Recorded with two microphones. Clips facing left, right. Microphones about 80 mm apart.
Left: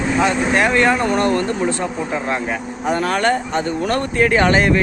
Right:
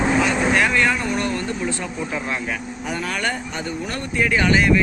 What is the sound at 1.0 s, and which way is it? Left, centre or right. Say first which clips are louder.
Speech: left 7 dB; left.